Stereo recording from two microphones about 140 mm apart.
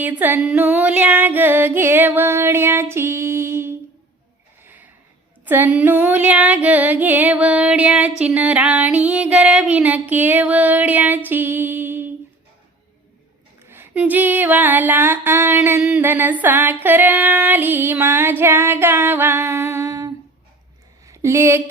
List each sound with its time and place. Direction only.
0.0 s female singing: 15° right (ahead or behind)
4.6 s snort: 15° right (ahead or behind)
5.5 s female singing: 15° right (ahead or behind)
13.7 s female singing: 15° right (ahead or behind)
21.1 s speech: 20° right (ahead or behind)